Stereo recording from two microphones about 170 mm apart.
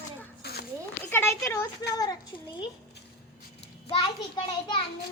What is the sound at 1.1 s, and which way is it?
Speech, 15° left (ahead or behind).